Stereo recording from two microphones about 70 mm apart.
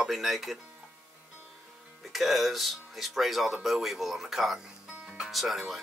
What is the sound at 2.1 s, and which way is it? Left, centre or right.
Speech, centre.